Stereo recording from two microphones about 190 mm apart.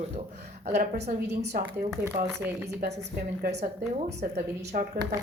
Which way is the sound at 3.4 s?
50° right (ahead or behind).